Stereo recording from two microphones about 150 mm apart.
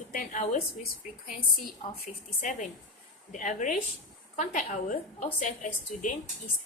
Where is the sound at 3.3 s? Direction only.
55° left (ahead or behind).